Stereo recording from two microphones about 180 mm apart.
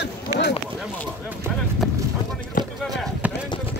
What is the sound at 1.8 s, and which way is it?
Vehicle, 5° left (ahead or behind).